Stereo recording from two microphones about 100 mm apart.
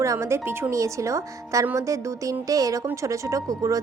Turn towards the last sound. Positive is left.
turn(degrees=-35)  # may be behind; listen again after turning